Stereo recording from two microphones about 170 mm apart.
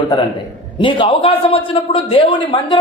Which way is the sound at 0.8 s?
30° left (ahead or behind).